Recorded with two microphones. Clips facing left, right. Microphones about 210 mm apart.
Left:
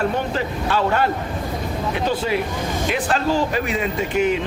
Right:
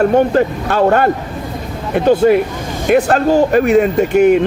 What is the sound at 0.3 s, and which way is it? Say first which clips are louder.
Speech: right 8 dB; 50° right (ahead or behind).